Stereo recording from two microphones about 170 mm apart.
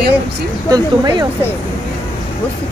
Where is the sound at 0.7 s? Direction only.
20° right (ahead or behind).